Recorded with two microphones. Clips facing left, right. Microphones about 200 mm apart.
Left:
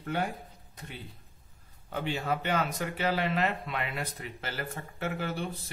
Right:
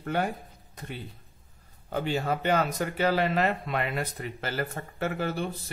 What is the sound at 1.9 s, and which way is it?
Speech, 40° right (ahead or behind).